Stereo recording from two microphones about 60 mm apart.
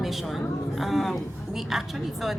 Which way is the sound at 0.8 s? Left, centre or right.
Centre.